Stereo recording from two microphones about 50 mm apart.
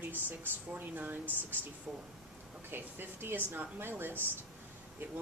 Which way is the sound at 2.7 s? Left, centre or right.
Right.